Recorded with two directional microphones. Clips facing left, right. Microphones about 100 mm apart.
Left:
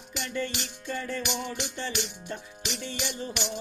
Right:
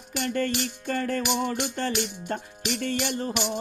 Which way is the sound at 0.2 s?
50° right (ahead or behind).